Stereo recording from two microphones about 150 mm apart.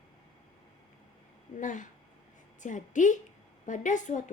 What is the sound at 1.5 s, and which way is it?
A woman's voice, 60° left (ahead or behind).